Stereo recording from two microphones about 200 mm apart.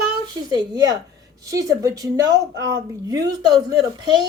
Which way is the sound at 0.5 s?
20° right (ahead or behind).